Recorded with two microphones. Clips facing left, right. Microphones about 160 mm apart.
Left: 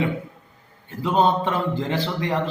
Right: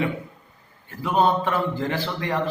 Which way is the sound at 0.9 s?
20° left (ahead or behind).